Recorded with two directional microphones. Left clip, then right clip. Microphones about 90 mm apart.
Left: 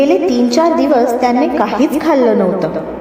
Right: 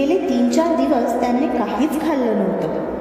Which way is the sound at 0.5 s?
55° left (ahead or behind).